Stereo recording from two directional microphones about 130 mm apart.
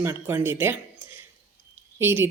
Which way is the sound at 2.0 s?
20° right (ahead or behind).